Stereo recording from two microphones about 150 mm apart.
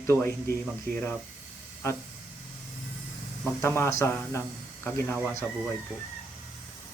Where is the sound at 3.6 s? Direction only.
15° left (ahead or behind).